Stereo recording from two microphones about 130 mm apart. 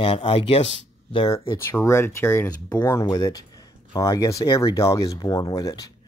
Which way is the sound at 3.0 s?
30° left (ahead or behind).